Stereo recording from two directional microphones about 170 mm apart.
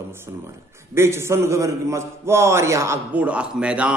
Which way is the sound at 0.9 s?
15° right (ahead or behind).